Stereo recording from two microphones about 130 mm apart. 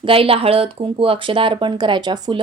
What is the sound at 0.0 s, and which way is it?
Speech, 45° right (ahead or behind).